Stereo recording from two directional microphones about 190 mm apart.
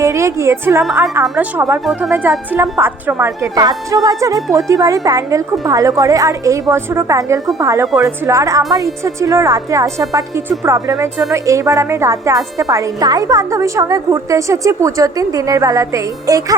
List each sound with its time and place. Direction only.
0.0 s a woman's voice: 15° right (ahead or behind)
0.9 s a woman's voice: centre (ahead or behind); by 16.6 s 20° right (ahead or behind)